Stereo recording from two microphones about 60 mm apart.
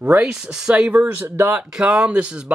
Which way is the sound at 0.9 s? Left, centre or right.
Right.